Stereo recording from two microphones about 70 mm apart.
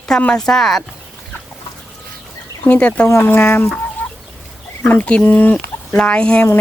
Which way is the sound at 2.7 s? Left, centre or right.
Centre.